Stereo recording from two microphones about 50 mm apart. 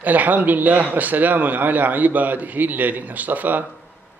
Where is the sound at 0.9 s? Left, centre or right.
Right.